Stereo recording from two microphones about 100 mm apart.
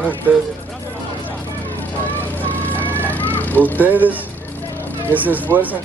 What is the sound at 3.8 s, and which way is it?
Speech, 15° right (ahead or behind).